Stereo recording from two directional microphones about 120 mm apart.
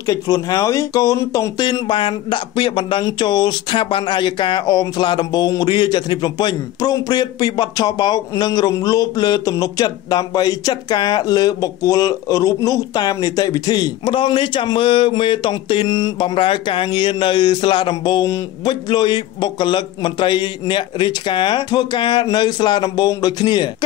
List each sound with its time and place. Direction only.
0.0 s speech: 30° left (ahead or behind)
1.6 s speech: 40° left (ahead or behind)
14.1 s speech: 45° left (ahead or behind)